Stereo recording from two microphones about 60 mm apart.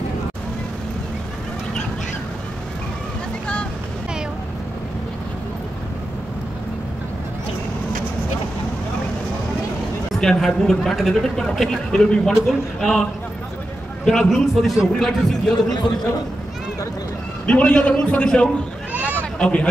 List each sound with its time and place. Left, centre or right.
10.2 s a man's voice: centre
14.0 s a man's voice: centre
17.5 s a man's voice: left